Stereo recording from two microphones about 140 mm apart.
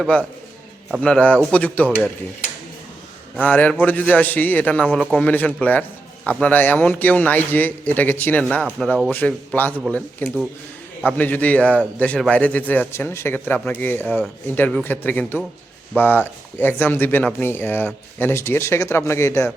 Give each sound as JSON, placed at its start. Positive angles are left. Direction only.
{"t": 1.0, "sound": "a man's voice", "side_deg": 10}
{"t": 3.3, "sound": "a man's voice", "side_deg": 10}